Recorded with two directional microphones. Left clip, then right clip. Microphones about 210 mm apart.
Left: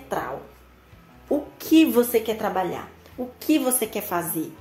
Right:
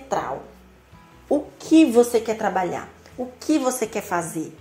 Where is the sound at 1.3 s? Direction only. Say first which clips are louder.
Right 2 dB; centre (ahead or behind).